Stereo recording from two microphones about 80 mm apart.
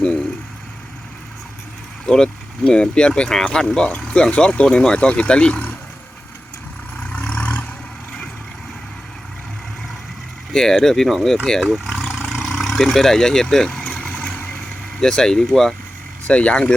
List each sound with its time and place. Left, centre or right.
0.0 s vehicle: centre
2.0 s speech: centre
7.1 s vehicle: centre
10.5 s speech: centre
11.8 s vehicle: centre
15.0 s speech: centre
16.2 s speech: centre